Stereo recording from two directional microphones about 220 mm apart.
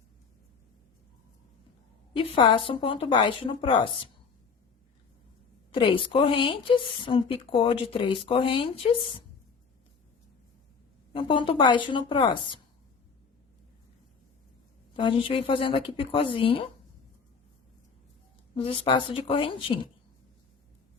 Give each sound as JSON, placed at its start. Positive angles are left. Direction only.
{"t": 2.1, "sound": "speech", "side_deg": 20}
{"t": 5.7, "sound": "speech", "side_deg": 25}
{"t": 11.1, "sound": "speech", "side_deg": 25}
{"t": 14.9, "sound": "speech", "side_deg": 25}
{"t": 18.5, "sound": "speech", "side_deg": 25}